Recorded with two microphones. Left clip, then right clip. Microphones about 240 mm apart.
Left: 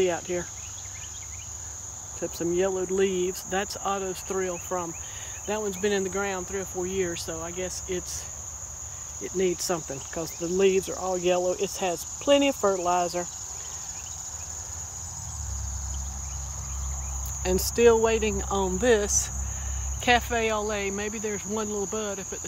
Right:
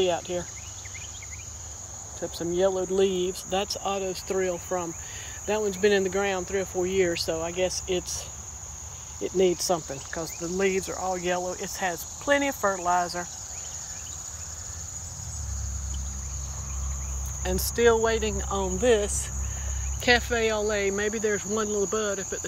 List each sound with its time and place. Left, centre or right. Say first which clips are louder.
0.0 s cricket: even; centre
2.2 s cricket: right 1 dB; left
5.5 s speech: right 4 dB; centre
9.2 s cricket: right 3 dB; centre
10.1 s cricket: left 3 dB; left
17.4 s cricket: left 2 dB; left; by 22.4 s centre